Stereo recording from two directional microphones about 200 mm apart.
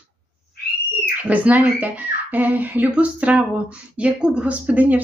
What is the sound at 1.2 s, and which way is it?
Speech, 5° right (ahead or behind).